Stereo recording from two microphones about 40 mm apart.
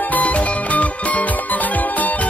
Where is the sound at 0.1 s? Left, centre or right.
Left.